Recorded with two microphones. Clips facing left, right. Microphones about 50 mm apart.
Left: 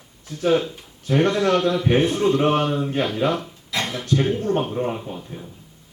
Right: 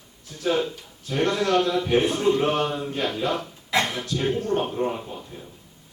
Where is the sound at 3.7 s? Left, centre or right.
Right.